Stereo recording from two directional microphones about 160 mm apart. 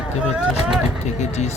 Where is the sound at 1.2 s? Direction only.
45° left (ahead or behind).